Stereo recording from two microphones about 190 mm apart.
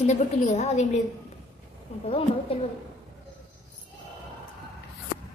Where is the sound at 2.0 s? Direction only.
30° left (ahead or behind).